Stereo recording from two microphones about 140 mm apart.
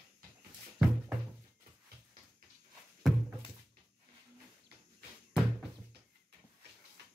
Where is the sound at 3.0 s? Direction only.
Centre (ahead or behind).